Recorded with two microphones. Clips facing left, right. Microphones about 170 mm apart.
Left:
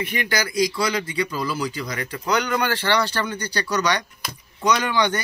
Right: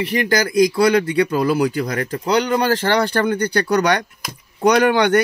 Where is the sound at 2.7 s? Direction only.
45° right (ahead or behind).